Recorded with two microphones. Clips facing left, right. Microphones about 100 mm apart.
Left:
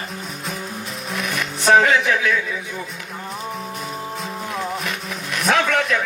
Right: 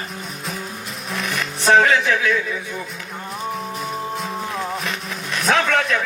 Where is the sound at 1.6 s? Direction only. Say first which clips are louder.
Even; 30° right (ahead or behind).